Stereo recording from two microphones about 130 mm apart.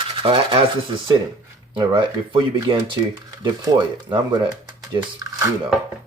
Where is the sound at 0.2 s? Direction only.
45° right (ahead or behind).